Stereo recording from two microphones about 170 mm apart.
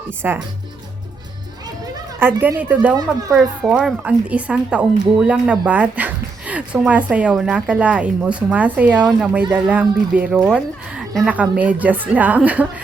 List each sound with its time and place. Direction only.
0.2 s speech: 10° right (ahead or behind)
2.1 s speech: 10° right (ahead or behind)
2.9 s speech: 20° right (ahead or behind)
3.3 s speech: 5° right (ahead or behind)